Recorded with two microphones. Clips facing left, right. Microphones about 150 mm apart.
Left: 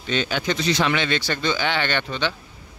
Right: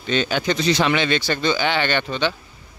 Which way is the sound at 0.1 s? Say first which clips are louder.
Right 3 dB; 35° right (ahead or behind).